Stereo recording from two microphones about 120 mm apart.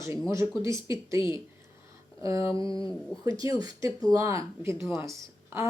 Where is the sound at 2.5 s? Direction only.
30° right (ahead or behind).